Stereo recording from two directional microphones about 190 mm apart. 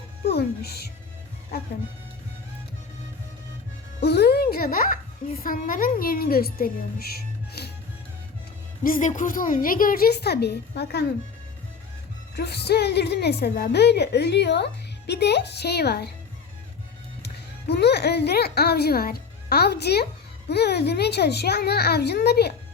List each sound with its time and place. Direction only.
0.3 s a woman's voice: 60° left (ahead or behind)
4.0 s a child's voice: 60° left (ahead or behind)
7.2 s music: 60° left (ahead or behind)
8.8 s a woman's voice: 45° left (ahead or behind); by 11.0 s 60° left (ahead or behind)
12.4 s a woman's voice: 60° left (ahead or behind)
17.2 s a child's voice: 60° left (ahead or behind)